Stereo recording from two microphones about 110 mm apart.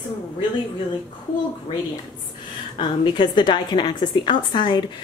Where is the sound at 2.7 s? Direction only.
45° left (ahead or behind).